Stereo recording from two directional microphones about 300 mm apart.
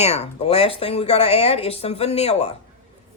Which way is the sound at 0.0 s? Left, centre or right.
Left.